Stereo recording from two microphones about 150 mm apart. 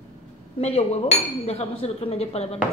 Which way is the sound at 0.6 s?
45° left (ahead or behind).